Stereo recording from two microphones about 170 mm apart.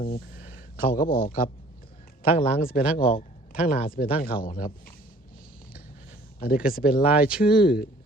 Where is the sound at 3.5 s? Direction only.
55° left (ahead or behind).